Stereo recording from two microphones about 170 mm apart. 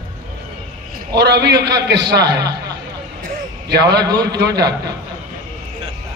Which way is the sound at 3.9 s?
25° right (ahead or behind).